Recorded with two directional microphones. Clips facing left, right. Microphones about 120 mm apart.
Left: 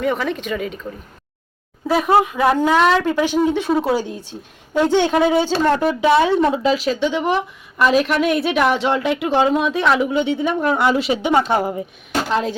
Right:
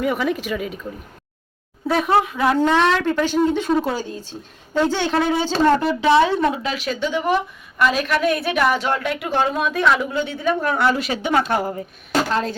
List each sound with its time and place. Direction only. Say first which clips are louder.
0.0 s speech: even; 5° right (ahead or behind)
1.9 s speech: left 2 dB; 5° left (ahead or behind)
2.4 s a woman's voice: left 2 dB; 15° left (ahead or behind)